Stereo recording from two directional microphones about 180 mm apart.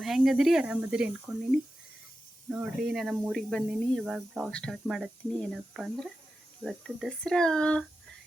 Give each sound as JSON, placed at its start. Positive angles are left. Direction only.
{"t": 0.0, "sound": "speech", "side_deg": 0}